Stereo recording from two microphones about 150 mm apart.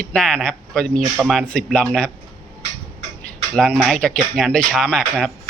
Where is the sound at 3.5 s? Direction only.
5° left (ahead or behind).